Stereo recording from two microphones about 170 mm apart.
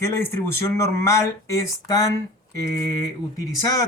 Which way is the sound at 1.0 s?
20° left (ahead or behind).